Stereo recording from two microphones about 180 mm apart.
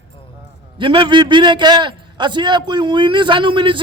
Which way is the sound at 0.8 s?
25° right (ahead or behind).